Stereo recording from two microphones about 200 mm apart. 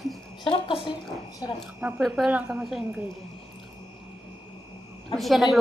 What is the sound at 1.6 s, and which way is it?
Speech, 5° right (ahead or behind).